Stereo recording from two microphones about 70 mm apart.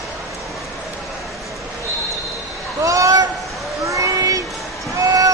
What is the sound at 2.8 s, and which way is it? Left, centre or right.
Speech, right.